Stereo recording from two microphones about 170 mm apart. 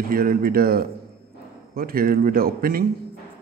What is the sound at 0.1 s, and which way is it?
A man's voice, 60° right (ahead or behind).